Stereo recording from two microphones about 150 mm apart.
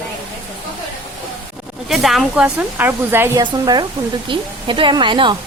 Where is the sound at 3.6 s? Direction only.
30° right (ahead or behind).